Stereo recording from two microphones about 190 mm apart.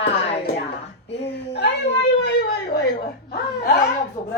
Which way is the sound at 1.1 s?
65° left (ahead or behind).